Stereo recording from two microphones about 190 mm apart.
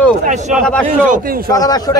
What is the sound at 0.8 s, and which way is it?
Speech, 45° right (ahead or behind).